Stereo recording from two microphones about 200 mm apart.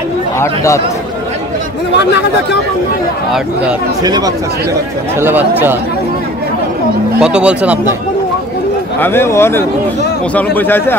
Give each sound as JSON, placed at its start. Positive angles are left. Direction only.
{"t": 4.0, "sound": "speech", "side_deg": -20}
{"t": 5.2, "sound": "speech", "side_deg": -10}
{"t": 7.2, "sound": "speech", "side_deg": -5}
{"t": 9.0, "sound": "speech", "side_deg": 10}